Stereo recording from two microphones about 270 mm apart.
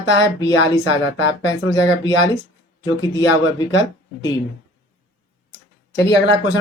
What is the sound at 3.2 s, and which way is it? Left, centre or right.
Speech, left.